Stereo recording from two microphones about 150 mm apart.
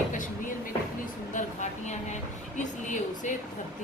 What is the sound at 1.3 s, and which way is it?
A woman's voice, 50° left (ahead or behind).